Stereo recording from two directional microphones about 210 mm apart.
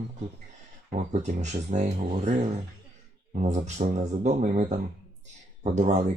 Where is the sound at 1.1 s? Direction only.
35° right (ahead or behind).